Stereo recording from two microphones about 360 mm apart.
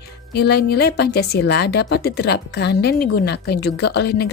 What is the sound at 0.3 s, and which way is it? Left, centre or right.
Speech, left.